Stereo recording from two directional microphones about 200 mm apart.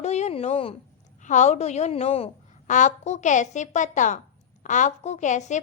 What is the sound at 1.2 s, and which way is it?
A woman's voice, 35° left (ahead or behind).